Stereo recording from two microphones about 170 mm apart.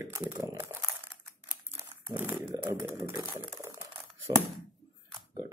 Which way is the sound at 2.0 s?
10° right (ahead or behind).